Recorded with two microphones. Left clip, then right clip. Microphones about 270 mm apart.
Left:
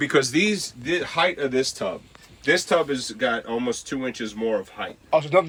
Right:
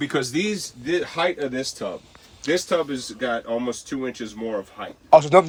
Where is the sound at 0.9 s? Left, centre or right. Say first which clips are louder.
Left 1 dB; centre.